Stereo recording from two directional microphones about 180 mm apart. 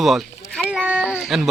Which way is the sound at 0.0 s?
Centre (ahead or behind).